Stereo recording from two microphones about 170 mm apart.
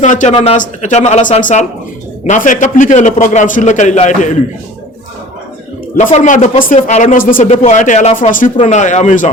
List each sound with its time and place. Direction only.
0.0 s a man's voice: 45° left (ahead or behind)
6.1 s a man's voice: 45° left (ahead or behind)
7.5 s a man's voice: 40° left (ahead or behind)